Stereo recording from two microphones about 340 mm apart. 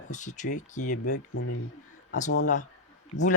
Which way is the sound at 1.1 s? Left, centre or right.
Left.